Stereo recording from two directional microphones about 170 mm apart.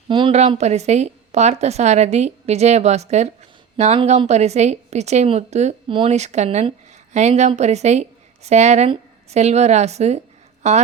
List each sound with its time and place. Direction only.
0.1 s a woman's voice: 30° right (ahead or behind)